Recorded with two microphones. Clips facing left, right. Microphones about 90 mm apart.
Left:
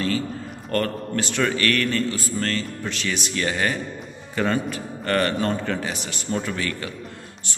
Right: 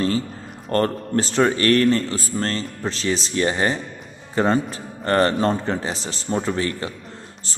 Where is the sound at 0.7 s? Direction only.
30° right (ahead or behind).